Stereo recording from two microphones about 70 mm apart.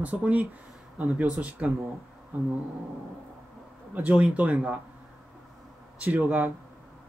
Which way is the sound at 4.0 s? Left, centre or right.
Centre.